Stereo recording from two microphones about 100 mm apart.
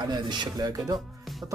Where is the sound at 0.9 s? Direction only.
Centre (ahead or behind).